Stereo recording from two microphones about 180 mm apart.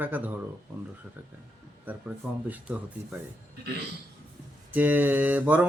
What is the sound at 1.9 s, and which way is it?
Speech, 10° right (ahead or behind).